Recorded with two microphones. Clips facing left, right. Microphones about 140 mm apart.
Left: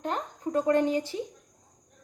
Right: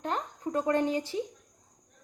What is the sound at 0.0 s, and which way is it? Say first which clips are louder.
Cricket: left 1 dB; 25° right (ahead or behind).